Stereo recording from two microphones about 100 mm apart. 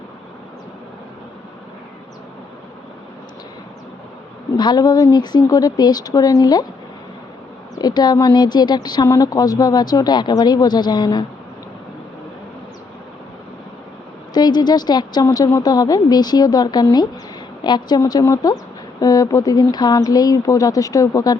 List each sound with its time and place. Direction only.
4.5 s speech: 45° left (ahead or behind)
7.8 s a woman's voice: 45° left (ahead or behind)
14.3 s a woman's voice: 45° left (ahead or behind)